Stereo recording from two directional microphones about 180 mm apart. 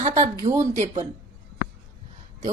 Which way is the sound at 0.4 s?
45° right (ahead or behind).